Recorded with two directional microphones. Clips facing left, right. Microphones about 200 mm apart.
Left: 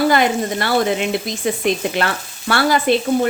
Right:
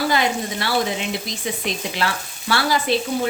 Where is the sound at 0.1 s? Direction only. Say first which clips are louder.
Left 5 dB; 55° left (ahead or behind).